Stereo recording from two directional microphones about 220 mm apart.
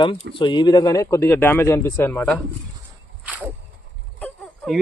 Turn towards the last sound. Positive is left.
turn(degrees=5)  # may be behind; listen again after turning